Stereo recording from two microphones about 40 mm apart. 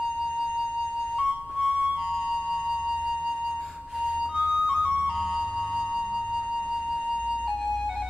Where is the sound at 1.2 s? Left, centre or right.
Right.